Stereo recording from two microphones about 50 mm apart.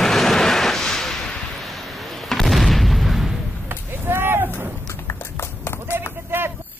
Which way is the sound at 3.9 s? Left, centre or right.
Right.